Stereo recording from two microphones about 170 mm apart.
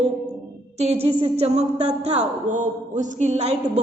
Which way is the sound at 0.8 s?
40° right (ahead or behind).